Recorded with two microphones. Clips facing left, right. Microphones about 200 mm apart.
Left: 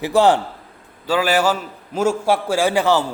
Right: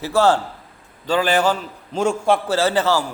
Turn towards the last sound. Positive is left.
turn(degrees=15)  # may be behind; listen again after turning